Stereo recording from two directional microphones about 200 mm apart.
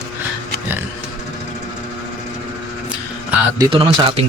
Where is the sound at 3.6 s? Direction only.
25° right (ahead or behind).